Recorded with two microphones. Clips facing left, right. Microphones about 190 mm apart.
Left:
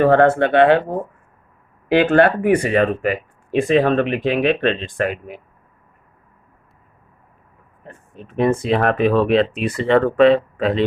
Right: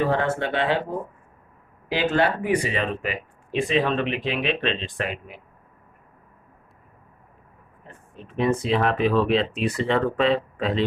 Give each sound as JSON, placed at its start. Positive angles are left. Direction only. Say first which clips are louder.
{"t": 0.0, "sound": "speech", "louder": "left 10 dB", "side_deg": 60}
{"t": 8.1, "sound": "speech", "louder": "left 5 dB", "side_deg": 55}